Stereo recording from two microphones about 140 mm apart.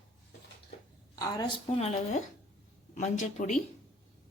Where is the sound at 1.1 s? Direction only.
25° left (ahead or behind).